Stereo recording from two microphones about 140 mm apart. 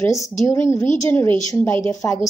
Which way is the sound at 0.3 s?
20° left (ahead or behind).